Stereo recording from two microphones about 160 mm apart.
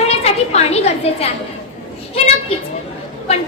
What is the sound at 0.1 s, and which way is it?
A woman's voice, 40° left (ahead or behind).